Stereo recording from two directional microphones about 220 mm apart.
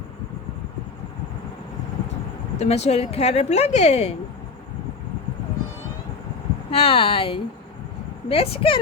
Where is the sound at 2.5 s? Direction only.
30° left (ahead or behind).